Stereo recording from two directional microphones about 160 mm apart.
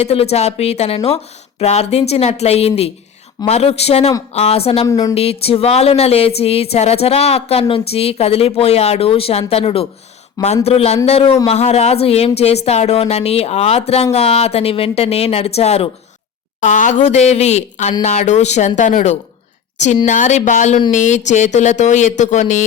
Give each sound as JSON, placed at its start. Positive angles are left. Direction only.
{"t": 0.0, "sound": "speech", "side_deg": 40}
{"t": 4.9, "sound": "speech", "side_deg": 25}
{"t": 5.1, "sound": "speech", "side_deg": 40}
{"t": 16.6, "sound": "speech", "side_deg": 55}